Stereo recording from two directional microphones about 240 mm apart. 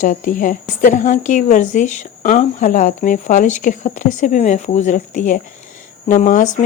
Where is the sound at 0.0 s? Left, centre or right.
Left.